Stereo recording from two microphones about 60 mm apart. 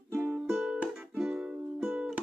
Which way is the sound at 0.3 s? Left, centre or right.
Centre.